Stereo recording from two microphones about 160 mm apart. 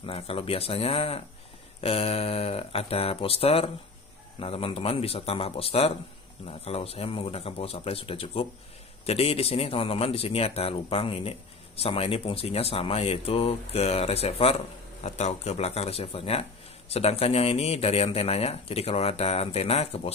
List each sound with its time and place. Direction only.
0.0 s a man's voice: 35° left (ahead or behind)